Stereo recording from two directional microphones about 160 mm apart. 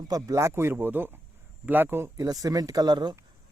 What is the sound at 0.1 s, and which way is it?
Speech, 20° right (ahead or behind).